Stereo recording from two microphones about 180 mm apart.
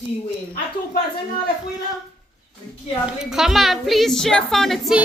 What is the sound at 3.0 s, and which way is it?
A woman's voice, centre (ahead or behind).